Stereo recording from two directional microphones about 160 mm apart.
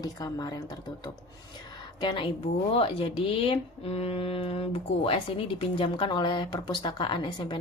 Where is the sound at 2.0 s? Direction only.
25° left (ahead or behind).